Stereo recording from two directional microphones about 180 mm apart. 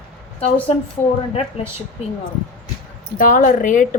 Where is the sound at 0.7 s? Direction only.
35° left (ahead or behind).